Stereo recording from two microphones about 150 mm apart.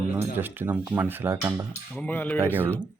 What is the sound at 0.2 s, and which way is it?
Speech, 15° right (ahead or behind).